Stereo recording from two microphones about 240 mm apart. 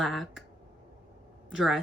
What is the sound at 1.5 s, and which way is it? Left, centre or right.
Speech, centre.